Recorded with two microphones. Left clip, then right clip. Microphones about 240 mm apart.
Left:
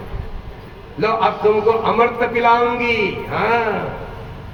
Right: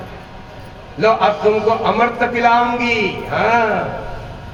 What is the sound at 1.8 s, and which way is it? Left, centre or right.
A man's voice, right.